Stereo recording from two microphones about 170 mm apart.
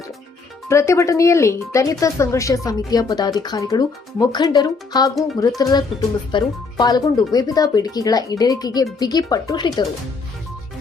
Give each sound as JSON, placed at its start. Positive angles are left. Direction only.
{"t": 0.7, "sound": "speech", "side_deg": 15}